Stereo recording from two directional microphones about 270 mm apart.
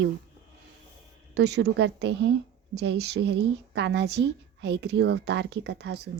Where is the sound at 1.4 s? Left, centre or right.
Right.